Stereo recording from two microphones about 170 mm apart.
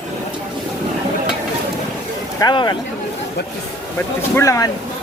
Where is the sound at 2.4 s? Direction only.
25° left (ahead or behind).